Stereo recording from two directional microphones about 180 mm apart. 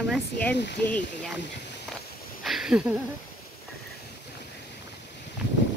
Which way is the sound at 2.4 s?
Centre (ahead or behind).